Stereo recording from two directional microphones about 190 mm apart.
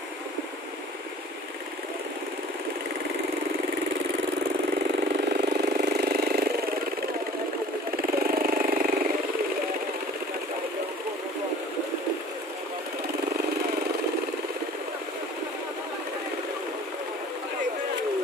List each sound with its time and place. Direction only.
5.0 s engine: 60° right (ahead or behind)
7.9 s engine: 50° right (ahead or behind)